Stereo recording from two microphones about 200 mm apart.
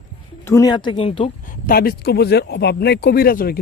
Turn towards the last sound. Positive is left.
turn(degrees=45)  # may be behind; listen again after turning